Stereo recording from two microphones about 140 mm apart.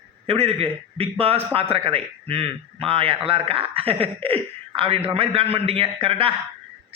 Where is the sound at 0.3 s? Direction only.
45° right (ahead or behind).